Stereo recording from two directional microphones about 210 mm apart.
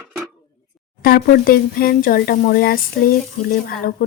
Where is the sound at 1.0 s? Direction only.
45° left (ahead or behind).